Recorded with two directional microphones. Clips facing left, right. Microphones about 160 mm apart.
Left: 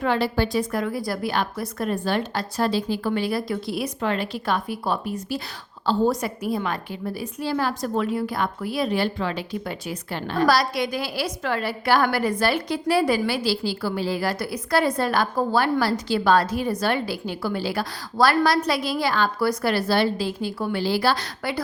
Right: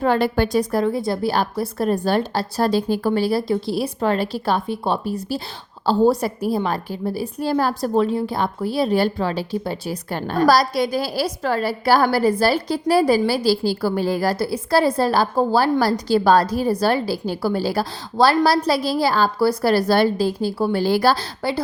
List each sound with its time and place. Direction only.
0.0 s a woman's voice: 45° right (ahead or behind); by 21.6 s 30° right (ahead or behind)